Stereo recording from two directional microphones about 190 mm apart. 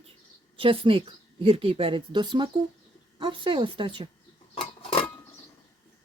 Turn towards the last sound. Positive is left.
turn(degrees=30)  # may be behind; listen again after turning